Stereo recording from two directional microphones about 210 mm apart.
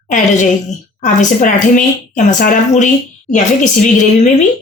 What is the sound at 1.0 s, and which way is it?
Speech, 35° left (ahead or behind).